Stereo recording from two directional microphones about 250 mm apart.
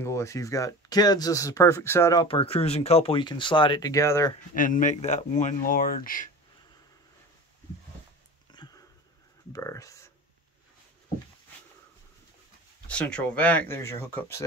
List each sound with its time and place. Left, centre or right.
0.0 s speech: centre
4.6 s speech: left
8.5 s a sound: centre
9.5 s speech: centre
12.8 s speech: centre